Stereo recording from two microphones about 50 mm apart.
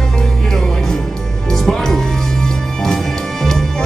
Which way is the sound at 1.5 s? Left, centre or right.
Centre.